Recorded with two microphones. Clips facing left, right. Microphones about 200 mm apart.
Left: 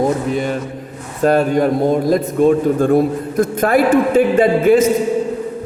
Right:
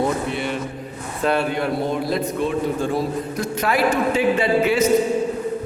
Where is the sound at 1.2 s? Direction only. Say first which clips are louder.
Left 7 dB; 45° left (ahead or behind).